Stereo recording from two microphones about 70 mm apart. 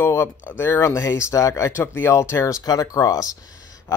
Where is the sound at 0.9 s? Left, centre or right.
Left.